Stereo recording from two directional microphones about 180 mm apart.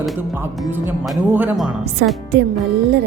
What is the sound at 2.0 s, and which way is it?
Speech, 65° right (ahead or behind).